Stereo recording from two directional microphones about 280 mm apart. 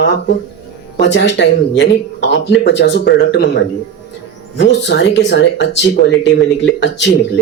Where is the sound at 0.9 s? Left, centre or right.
Left.